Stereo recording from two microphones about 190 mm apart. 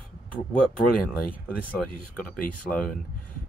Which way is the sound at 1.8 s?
Centre (ahead or behind).